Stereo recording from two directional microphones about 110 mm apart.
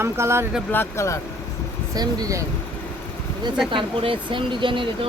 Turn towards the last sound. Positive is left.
turn(degrees=-50)  # may be behind; listen again after turning